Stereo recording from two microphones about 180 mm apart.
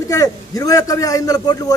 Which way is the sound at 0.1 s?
20° left (ahead or behind).